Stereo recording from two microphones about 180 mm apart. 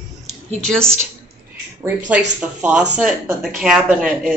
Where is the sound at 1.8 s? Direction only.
10° right (ahead or behind).